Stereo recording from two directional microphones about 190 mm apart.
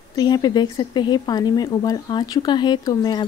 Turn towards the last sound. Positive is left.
turn(degrees=20)  # may be behind; listen again after turning